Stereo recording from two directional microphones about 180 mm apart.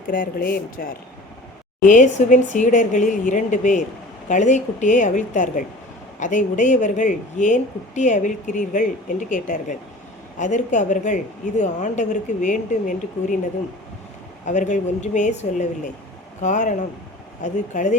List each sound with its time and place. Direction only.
0.1 s speech: 50° left (ahead or behind)
1.8 s speech: 45° left (ahead or behind)
14.4 s speech: 45° left (ahead or behind)